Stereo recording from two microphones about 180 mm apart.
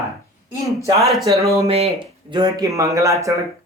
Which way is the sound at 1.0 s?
Centre (ahead or behind).